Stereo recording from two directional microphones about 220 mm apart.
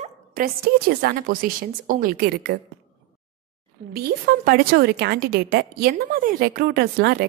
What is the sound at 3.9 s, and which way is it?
A woman's voice, 40° right (ahead or behind).